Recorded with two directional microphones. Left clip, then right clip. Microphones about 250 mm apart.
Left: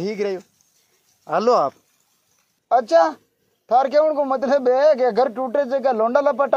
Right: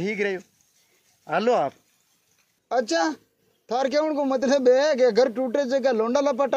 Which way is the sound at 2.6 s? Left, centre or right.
Centre.